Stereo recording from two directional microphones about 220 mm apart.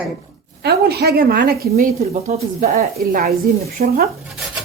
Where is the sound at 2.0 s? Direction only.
30° right (ahead or behind).